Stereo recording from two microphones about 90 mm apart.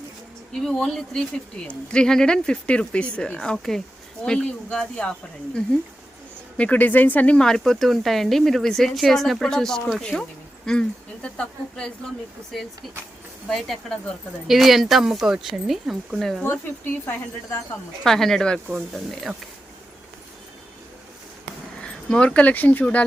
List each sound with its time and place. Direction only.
0.5 s speech: 5° left (ahead or behind)
6.6 s speech: 15° left (ahead or behind); by 16.4 s centre (ahead or behind)
16.4 s speech: 25° left (ahead or behind)
18.0 s speech: 5° left (ahead or behind)
21.8 s speech: 10° left (ahead or behind)